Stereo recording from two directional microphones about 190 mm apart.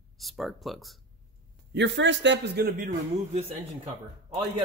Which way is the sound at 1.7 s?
70° right (ahead or behind).